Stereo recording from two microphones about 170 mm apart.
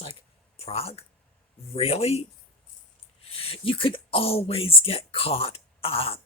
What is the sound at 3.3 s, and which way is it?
Speech, 35° left (ahead or behind).